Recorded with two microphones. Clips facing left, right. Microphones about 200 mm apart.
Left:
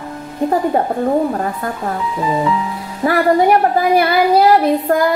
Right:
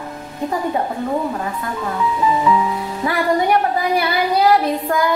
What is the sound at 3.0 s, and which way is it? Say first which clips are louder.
Female singing: left 6 dB; 50° left (ahead or behind).